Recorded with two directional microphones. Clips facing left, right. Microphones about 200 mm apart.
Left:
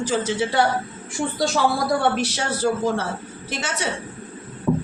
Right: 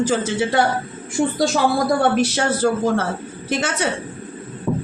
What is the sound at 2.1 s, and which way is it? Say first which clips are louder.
A man's voice: right 6 dB; 50° right (ahead or behind).